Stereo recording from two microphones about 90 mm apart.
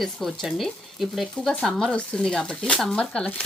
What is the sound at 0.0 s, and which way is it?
A woman's voice, centre (ahead or behind).